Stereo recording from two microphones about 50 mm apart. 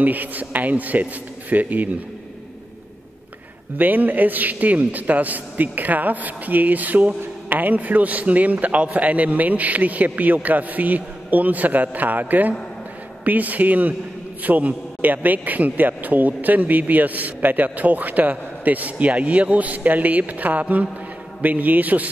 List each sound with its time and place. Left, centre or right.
0.0 s a man's voice: right
3.7 s a man's voice: right